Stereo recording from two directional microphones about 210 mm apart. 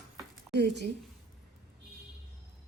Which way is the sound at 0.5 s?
55° right (ahead or behind).